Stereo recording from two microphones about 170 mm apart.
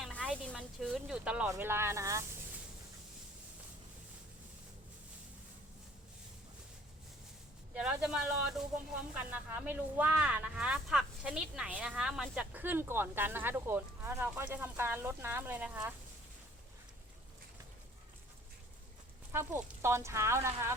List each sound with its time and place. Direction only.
0.0 s snake: 5° left (ahead or behind)
0.4 s speech: centre (ahead or behind); by 2.2 s 15° right (ahead or behind)
7.7 s speech: 5° right (ahead or behind)
19.3 s speech: 15° right (ahead or behind)